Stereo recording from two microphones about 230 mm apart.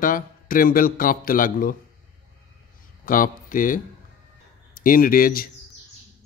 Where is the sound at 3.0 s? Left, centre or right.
Left.